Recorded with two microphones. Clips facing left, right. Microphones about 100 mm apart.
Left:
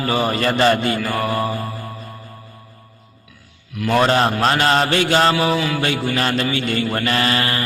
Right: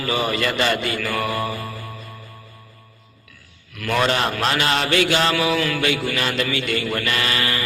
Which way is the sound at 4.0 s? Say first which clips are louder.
Left 4 dB; 35° left (ahead or behind).